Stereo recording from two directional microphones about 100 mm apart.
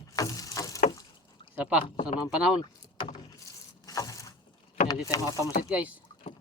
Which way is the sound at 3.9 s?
35° left (ahead or behind).